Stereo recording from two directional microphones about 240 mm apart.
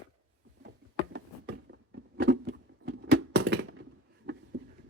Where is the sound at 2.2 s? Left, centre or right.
Right.